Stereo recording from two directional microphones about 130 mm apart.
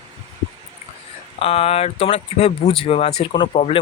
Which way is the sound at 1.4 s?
50° left (ahead or behind).